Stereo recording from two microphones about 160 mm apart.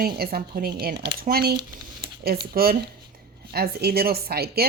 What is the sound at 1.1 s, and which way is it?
Speech, 70° right (ahead or behind).